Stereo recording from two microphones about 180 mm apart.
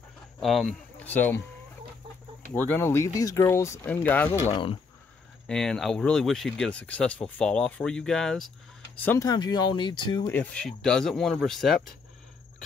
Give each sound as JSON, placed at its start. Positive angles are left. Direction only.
{"t": 0.4, "sound": "speech", "side_deg": 0}
{"t": 2.5, "sound": "speech", "side_deg": 10}
{"t": 9.3, "sound": "speech", "side_deg": 20}
{"t": 10.3, "sound": "speech", "side_deg": 5}